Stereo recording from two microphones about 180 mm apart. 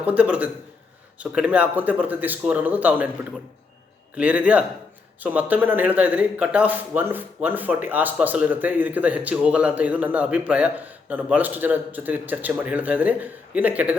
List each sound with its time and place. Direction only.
0.0 s a man's voice: 10° right (ahead or behind)
4.1 s a man's voice: 5° right (ahead or behind)